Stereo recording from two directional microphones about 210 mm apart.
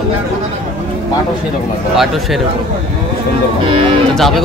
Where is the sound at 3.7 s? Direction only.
25° right (ahead or behind).